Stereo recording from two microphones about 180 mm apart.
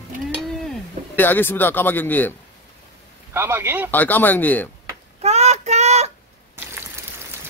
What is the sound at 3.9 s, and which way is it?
Speech, 10° left (ahead or behind).